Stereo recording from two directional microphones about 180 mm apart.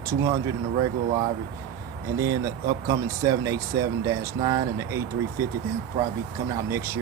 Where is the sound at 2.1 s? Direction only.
15° right (ahead or behind).